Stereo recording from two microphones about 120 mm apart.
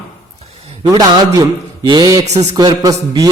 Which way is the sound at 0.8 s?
30° right (ahead or behind).